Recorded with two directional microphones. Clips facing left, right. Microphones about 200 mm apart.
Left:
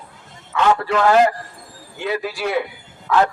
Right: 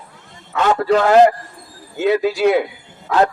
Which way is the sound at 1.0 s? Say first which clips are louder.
Right 2 dB; 35° right (ahead or behind).